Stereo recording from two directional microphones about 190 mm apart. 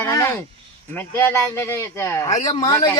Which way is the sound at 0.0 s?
15° left (ahead or behind).